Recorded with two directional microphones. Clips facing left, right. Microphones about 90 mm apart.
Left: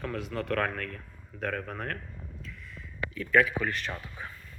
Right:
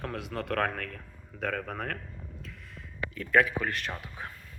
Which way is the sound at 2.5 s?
60° right (ahead or behind).